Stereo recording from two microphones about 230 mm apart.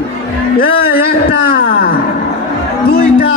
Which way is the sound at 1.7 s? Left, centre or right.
Left.